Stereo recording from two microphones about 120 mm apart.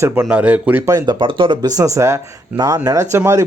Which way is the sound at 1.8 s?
25° right (ahead or behind).